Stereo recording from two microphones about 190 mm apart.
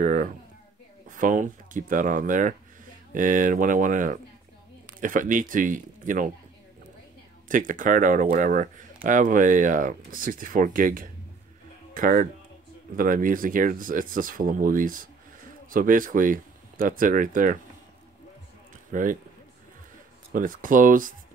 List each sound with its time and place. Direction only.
0.0 s speech: 40° right (ahead or behind)
7.4 s speech: 45° right (ahead or behind)
18.9 s speech: 45° right (ahead or behind)
20.3 s speech: 45° right (ahead or behind)